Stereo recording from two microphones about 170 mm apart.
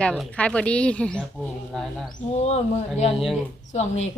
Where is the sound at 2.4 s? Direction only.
40° left (ahead or behind).